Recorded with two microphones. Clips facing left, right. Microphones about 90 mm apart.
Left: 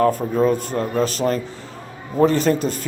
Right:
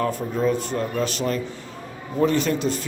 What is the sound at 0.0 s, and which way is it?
Speech, 45° left (ahead or behind).